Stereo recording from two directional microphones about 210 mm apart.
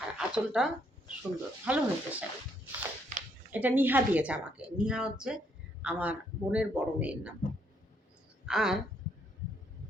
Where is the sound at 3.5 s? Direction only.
10° right (ahead or behind).